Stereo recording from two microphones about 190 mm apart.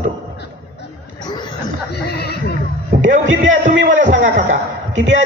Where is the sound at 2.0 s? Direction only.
60° left (ahead or behind).